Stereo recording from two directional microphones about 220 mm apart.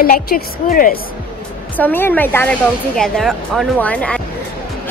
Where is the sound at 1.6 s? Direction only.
5° left (ahead or behind).